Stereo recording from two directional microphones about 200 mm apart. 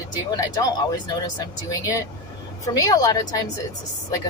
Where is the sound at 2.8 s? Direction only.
20° left (ahead or behind).